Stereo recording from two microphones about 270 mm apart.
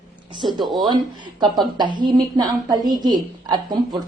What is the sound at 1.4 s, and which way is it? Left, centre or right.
A woman's voice, centre.